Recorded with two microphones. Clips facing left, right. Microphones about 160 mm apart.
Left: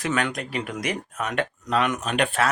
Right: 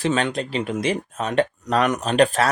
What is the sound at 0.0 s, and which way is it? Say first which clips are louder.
Speech: right 4 dB; 30° right (ahead or behind).